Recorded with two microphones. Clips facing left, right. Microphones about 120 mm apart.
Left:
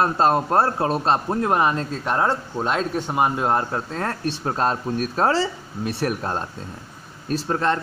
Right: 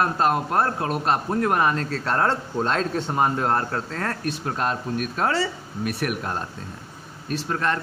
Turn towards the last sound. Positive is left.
turn(degrees=30)  # may be behind; listen again after turning